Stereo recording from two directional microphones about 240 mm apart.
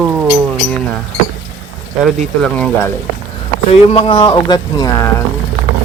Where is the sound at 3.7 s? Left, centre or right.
Left.